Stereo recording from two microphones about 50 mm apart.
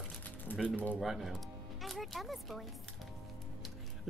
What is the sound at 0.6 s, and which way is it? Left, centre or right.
Speech, left.